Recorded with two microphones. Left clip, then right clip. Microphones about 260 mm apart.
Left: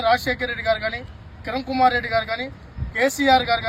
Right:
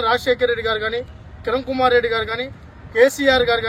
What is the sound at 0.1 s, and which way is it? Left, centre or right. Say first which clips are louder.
Speech: right 5 dB; centre.